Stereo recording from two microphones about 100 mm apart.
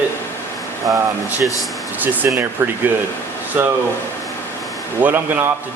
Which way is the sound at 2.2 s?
20° right (ahead or behind).